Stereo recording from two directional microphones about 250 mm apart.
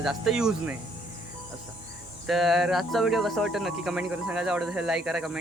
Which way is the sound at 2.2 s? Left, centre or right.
Centre.